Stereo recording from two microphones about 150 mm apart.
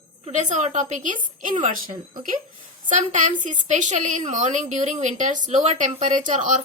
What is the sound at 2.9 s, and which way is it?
A woman's voice, 55° right (ahead or behind).